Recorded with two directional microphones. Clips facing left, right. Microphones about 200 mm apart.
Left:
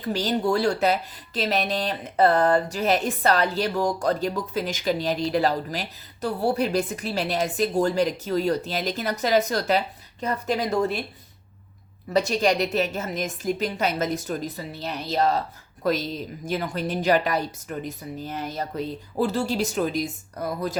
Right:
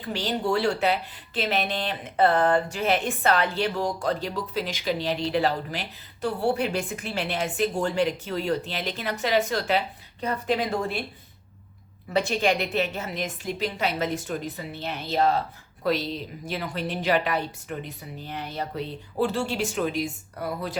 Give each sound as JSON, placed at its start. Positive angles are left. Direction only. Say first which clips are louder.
{"t": 0.0, "sound": "speech", "louder": "left 4 dB", "side_deg": 40}
{"t": 12.1, "sound": "a woman's voice", "louder": "left 2 dB", "side_deg": 40}